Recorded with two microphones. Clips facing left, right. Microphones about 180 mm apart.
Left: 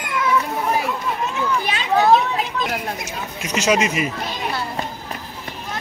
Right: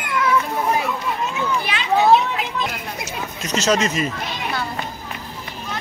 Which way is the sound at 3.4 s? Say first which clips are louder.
Even; 10° left (ahead or behind).